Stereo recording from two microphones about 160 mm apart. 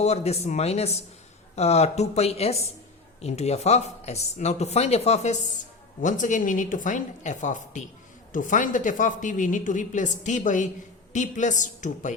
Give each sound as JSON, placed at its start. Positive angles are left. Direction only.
{"t": 0.0, "sound": "speech", "side_deg": 40}